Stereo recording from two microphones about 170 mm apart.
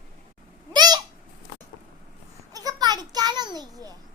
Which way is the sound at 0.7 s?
25° right (ahead or behind).